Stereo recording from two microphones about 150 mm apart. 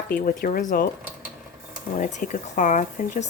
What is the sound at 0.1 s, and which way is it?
Speech, 75° left (ahead or behind).